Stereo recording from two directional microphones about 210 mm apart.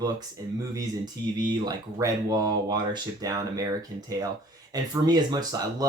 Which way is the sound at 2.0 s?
15° right (ahead or behind).